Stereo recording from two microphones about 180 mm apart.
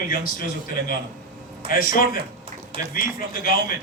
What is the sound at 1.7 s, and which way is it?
A man's voice, 50° left (ahead or behind).